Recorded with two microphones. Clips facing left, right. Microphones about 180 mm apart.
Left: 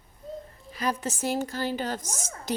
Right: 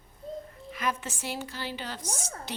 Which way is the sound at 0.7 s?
35° left (ahead or behind).